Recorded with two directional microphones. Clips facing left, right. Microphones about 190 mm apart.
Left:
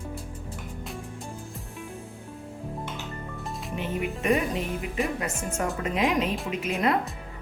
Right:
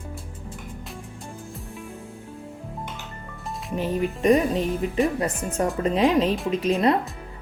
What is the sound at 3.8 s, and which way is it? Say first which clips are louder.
Speech: right 6 dB; 35° right (ahead or behind).